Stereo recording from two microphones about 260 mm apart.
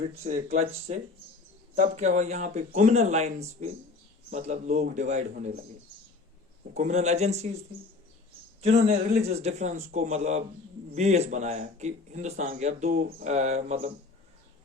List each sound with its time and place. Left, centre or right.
0.3 s a man's voice: right
6.7 s a man's voice: right
8.6 s a man's voice: right